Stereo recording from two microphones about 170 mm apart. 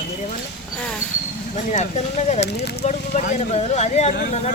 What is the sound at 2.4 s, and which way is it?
Speech, 75° left (ahead or behind).